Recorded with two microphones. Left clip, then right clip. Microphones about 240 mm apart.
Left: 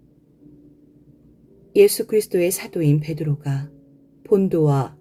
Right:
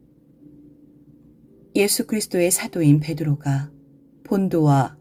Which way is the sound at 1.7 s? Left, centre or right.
Right.